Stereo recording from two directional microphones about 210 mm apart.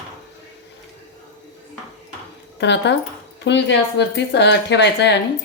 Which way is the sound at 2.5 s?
55° left (ahead or behind).